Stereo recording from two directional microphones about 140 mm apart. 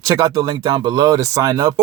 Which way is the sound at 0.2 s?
30° right (ahead or behind).